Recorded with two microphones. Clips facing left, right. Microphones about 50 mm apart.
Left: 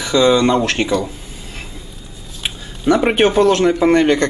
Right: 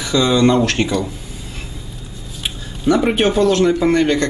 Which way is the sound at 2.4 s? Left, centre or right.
Left.